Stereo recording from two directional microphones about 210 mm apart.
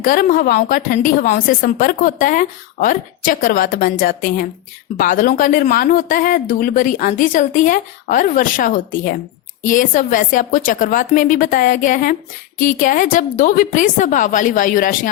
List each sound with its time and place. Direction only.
0.0 s a woman's voice: 40° left (ahead or behind)